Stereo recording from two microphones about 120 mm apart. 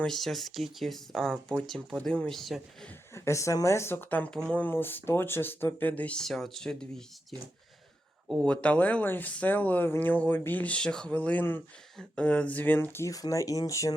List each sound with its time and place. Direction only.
0.0 s speech: 5° left (ahead or behind)
3.2 s speech: 25° left (ahead or behind)